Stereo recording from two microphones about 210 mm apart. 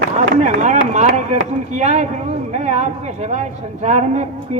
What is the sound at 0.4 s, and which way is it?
Speech, 35° right (ahead or behind).